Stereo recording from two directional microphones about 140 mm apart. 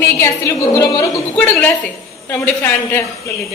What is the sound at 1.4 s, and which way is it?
A woman's voice, 10° left (ahead or behind).